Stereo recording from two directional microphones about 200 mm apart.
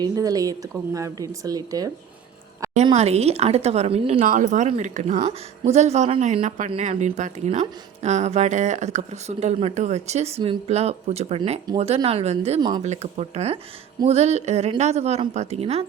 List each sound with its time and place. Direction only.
0.0 s speech: 15° right (ahead or behind)
2.8 s speech: 30° right (ahead or behind)
12.8 s speech: 35° right (ahead or behind)